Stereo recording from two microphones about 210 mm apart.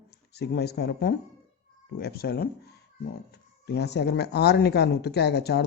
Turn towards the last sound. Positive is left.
turn(degrees=50)  # may be behind; listen again after turning